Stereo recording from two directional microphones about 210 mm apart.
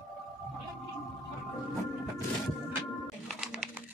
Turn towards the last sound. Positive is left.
turn(degrees=-5)  # may be behind; listen again after turning